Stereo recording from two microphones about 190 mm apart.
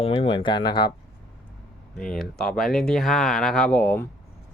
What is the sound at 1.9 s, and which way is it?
Speech, 5° left (ahead or behind).